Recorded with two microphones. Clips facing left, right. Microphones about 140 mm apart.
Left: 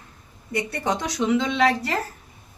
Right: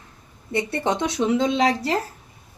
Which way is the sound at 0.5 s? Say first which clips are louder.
Right 2 dB; 25° right (ahead or behind).